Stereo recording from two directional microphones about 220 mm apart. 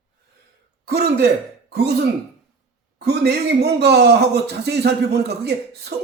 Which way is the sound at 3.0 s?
50° right (ahead or behind).